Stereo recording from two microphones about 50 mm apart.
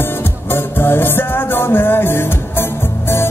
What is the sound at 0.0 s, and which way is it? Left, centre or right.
Music, left.